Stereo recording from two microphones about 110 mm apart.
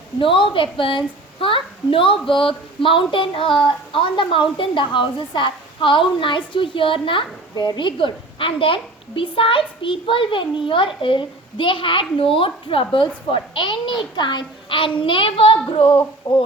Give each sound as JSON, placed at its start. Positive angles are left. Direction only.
{"t": 0.2, "sound": "a woman's voice", "side_deg": 50}
{"t": 16.3, "sound": "a woman's voice", "side_deg": 50}